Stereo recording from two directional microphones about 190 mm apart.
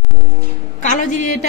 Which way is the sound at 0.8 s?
40° left (ahead or behind).